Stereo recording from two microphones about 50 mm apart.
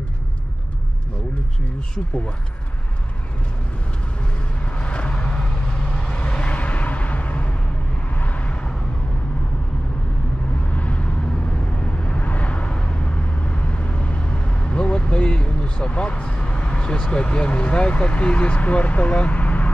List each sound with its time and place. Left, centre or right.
4.6 s vehicle: left
5.9 s a sound: left
10.7 s vehicle: left
17.1 s speech: left